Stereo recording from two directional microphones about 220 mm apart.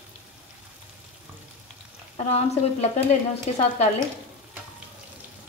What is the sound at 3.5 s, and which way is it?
Speech, 30° left (ahead or behind).